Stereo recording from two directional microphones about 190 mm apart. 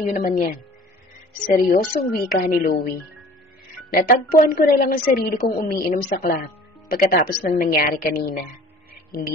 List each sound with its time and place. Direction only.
0.1 s a woman's voice: 45° left (ahead or behind)
1.5 s a woman's voice: 50° left (ahead or behind)
3.9 s a woman's voice: 50° left (ahead or behind)